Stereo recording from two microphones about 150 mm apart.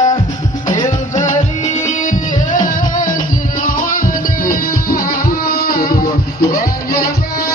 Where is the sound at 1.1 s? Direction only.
55° left (ahead or behind); by 7.1 s 70° left (ahead or behind).